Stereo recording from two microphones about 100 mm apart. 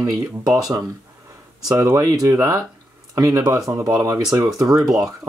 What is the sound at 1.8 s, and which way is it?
Speech, 35° right (ahead or behind).